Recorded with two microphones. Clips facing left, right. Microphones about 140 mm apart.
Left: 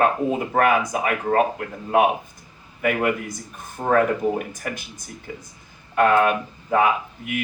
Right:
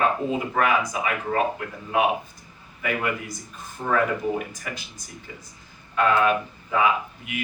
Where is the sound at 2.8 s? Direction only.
50° left (ahead or behind).